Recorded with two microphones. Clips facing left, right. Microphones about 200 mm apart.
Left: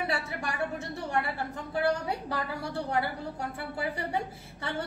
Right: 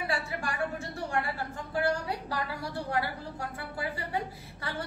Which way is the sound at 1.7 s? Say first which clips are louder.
Left 1 dB; 25° left (ahead or behind).